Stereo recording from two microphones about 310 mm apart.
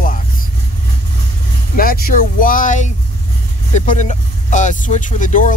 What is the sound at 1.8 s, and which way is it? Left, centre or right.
Speech, left.